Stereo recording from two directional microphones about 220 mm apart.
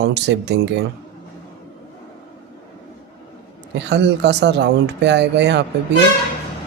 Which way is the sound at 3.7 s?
50° right (ahead or behind).